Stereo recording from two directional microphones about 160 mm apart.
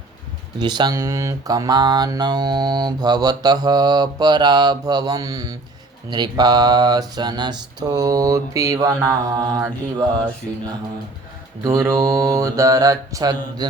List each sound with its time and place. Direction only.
0.6 s speech: 25° right (ahead or behind)
11.6 s speech: 20° right (ahead or behind)